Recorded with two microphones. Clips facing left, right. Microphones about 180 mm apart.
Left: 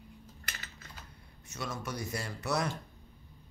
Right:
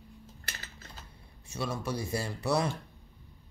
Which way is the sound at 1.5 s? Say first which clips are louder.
Right 5 dB; 30° right (ahead or behind).